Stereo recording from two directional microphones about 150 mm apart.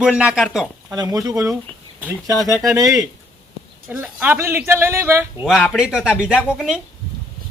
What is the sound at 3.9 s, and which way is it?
Speech, 15° right (ahead or behind).